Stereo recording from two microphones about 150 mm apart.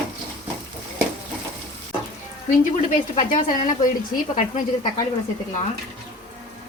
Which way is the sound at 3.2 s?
60° left (ahead or behind).